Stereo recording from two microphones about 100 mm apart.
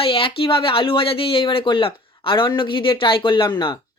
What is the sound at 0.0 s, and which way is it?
Speech, 65° left (ahead or behind).